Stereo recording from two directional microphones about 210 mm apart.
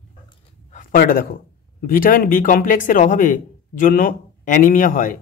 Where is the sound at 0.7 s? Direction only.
40° left (ahead or behind).